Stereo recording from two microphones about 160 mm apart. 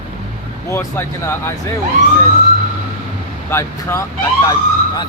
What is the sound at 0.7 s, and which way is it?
Speech, 15° left (ahead or behind).